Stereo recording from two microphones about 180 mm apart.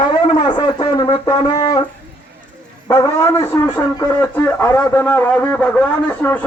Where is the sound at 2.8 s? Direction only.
15° left (ahead or behind).